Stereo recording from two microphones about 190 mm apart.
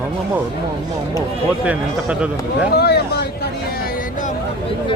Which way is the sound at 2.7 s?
55° left (ahead or behind).